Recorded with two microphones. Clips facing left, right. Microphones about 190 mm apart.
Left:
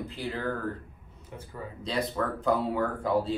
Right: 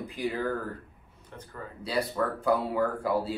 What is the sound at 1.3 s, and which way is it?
Speech, 5° left (ahead or behind).